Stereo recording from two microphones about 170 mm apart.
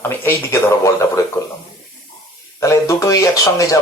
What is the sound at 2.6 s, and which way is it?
Speech, 20° left (ahead or behind).